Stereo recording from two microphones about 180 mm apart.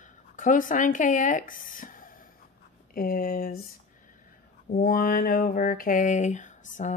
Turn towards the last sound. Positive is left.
turn(degrees=40)  # may be behind; listen again after turning